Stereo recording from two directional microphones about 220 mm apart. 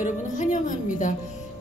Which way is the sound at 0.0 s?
35° left (ahead or behind).